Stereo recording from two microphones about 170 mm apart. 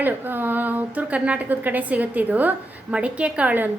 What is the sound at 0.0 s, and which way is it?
A woman's voice, 10° right (ahead or behind).